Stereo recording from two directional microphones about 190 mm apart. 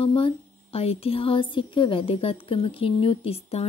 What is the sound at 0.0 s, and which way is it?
Speech, 30° left (ahead or behind).